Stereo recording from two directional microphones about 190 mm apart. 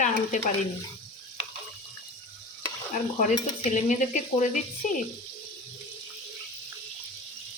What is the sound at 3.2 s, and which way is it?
Stir, 40° left (ahead or behind).